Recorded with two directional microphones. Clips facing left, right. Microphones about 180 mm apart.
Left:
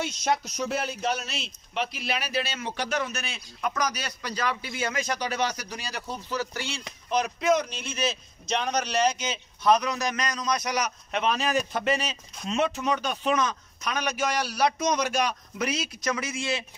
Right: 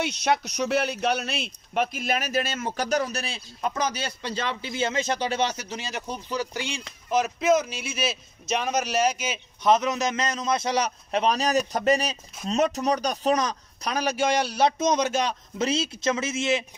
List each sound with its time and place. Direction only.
0.0 s speech: 70° right (ahead or behind); by 6.8 s 15° right (ahead or behind)
7.1 s a man's voice: 5° right (ahead or behind)
9.6 s a man's voice: 20° right (ahead or behind)